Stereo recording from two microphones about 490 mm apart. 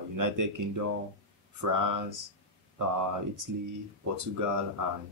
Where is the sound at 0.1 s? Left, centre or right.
Right.